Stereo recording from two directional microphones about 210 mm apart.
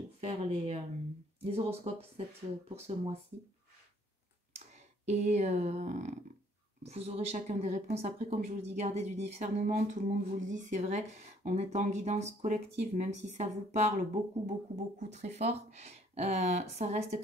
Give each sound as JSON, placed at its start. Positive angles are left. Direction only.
{"t": 0.2, "sound": "speech", "side_deg": -30}
{"t": 4.6, "sound": "speech", "side_deg": -30}